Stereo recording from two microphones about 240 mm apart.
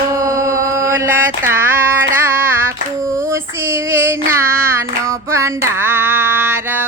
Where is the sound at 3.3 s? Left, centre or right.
Centre.